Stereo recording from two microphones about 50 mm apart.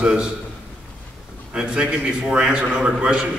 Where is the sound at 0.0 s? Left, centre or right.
Centre.